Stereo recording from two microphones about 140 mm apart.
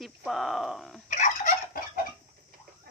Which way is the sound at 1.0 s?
65° left (ahead or behind).